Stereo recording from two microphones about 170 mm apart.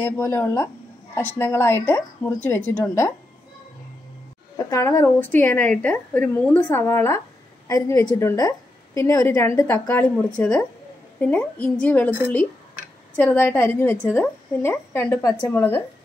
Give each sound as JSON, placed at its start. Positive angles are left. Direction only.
{"t": 0.0, "sound": "a woman's voice", "side_deg": 15}
{"t": 2.8, "sound": "a woman's voice", "side_deg": 15}
{"t": 4.6, "sound": "a woman's voice", "side_deg": 15}
{"t": 13.1, "sound": "a woman's voice", "side_deg": 10}